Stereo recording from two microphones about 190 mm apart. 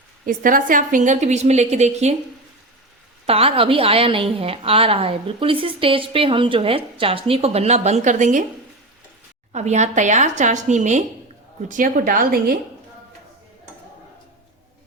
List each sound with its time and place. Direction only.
0.3 s a woman's voice: 45° right (ahead or behind)
3.2 s a woman's voice: 30° right (ahead or behind)
9.5 s a woman's voice: 35° right (ahead or behind)